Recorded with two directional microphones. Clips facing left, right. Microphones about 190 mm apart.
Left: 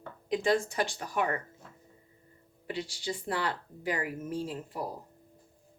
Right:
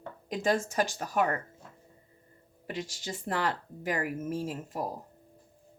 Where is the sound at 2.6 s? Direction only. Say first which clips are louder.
Left 2 dB; 45° right (ahead or behind).